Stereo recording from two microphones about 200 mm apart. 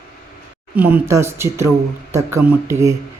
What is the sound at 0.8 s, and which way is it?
Mantra, 10° right (ahead or behind).